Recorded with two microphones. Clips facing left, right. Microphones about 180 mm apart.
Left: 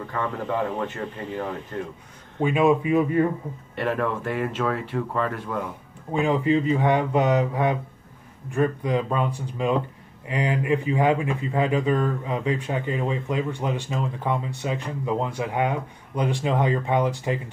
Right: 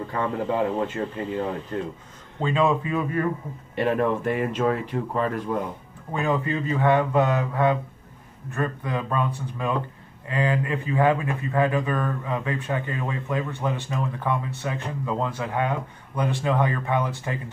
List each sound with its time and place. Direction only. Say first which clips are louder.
0.0 s speech: right 2 dB; 20° right (ahead or behind)
2.4 s speech: left 3 dB; 15° left (ahead or behind)
3.7 s speech: right 3 dB; 15° right (ahead or behind)
6.1 s speech: left 4 dB; 20° left (ahead or behind)